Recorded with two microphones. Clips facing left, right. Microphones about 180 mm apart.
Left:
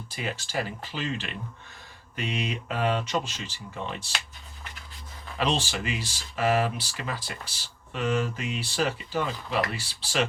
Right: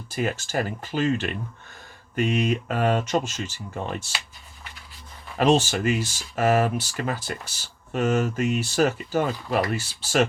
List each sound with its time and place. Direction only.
0.1 s speech: 45° right (ahead or behind)
5.4 s speech: 45° right (ahead or behind)